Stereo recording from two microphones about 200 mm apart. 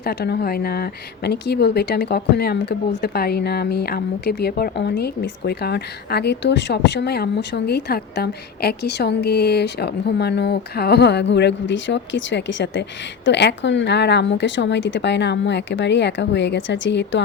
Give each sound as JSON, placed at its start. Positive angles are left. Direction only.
{"t": 0.0, "sound": "speech", "side_deg": 50}